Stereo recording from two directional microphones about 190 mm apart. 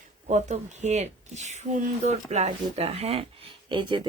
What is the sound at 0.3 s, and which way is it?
Speech, 35° right (ahead or behind).